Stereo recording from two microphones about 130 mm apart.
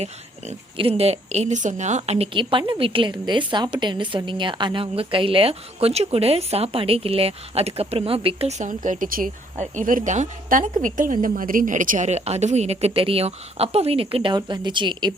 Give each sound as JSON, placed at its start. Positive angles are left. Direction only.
{"t": 0.0, "sound": "speech", "side_deg": -50}